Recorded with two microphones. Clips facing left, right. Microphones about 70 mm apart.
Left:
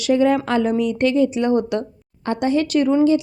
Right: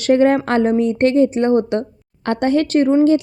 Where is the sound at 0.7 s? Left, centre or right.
Right.